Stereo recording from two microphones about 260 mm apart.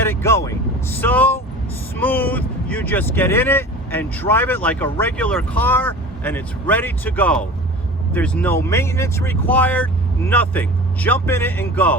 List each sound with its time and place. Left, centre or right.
0.0 s vehicle: centre
2.0 s speech: centre